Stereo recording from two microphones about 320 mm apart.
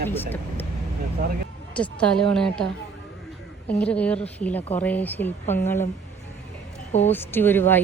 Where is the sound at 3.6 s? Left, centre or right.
Centre.